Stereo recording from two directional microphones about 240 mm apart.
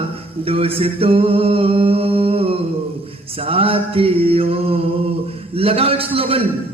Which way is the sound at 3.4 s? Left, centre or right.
Right.